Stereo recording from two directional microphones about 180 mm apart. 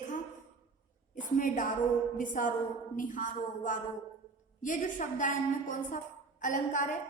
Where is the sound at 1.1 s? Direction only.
45° left (ahead or behind).